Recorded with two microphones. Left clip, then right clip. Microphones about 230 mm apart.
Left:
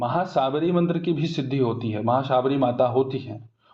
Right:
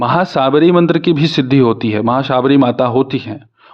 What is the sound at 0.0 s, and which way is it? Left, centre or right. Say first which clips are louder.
Speech: right 10 dB; right.